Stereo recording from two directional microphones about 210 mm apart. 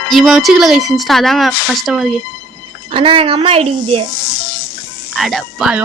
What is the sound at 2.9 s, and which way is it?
A woman's voice, 25° right (ahead or behind).